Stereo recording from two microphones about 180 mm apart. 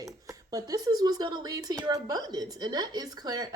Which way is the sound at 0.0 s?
20° right (ahead or behind).